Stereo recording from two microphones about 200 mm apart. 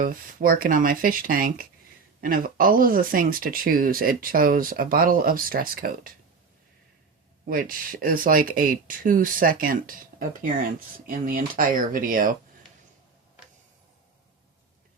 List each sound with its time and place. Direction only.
0.0 s speech: 45° right (ahead or behind)
7.4 s speech: 45° right (ahead or behind)